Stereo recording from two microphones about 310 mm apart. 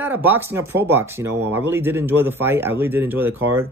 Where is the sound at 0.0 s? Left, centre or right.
Centre.